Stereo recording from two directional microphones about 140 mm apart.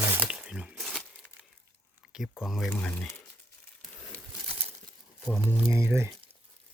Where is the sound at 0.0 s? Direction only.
10° right (ahead or behind).